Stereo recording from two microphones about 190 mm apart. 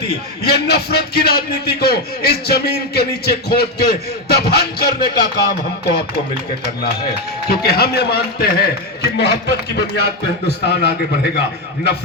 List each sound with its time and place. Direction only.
0.4 s a man's voice: 55° left (ahead or behind)
7.4 s a man's voice: 55° left (ahead or behind)